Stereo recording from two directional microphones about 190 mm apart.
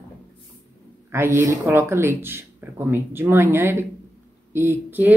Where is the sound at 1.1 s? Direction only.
15° right (ahead or behind).